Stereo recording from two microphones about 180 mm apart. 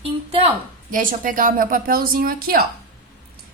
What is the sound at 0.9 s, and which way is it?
A woman's voice, 50° right (ahead or behind).